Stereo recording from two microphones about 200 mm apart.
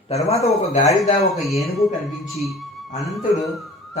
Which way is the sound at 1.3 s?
Centre (ahead or behind).